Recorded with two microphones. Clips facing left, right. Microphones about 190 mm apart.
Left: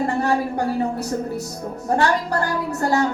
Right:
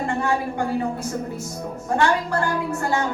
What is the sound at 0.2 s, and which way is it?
Speech, 40° left (ahead or behind).